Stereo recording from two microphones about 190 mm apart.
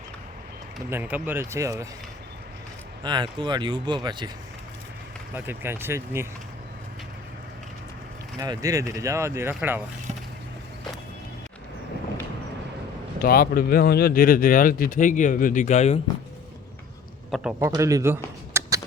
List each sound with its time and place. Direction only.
0.9 s speech: 10° right (ahead or behind)
3.0 s speech: 25° right (ahead or behind)
5.3 s speech: 10° right (ahead or behind)
8.4 s speech: 15° right (ahead or behind)
13.1 s speech: 50° left (ahead or behind)
17.6 s speech: 15° right (ahead or behind)
18.5 s a sound: 15° right (ahead or behind)